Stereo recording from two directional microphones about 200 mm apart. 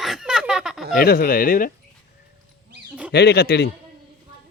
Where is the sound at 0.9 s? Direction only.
50° left (ahead or behind).